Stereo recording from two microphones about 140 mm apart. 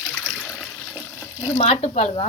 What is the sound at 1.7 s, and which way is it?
Speech, 45° left (ahead or behind).